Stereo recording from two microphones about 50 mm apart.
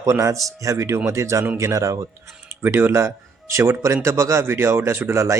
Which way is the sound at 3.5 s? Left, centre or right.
Right.